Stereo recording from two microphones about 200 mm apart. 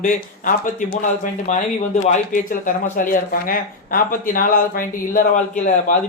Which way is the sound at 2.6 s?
45° left (ahead or behind).